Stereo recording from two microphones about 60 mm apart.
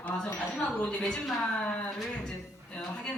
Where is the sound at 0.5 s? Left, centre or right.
Centre.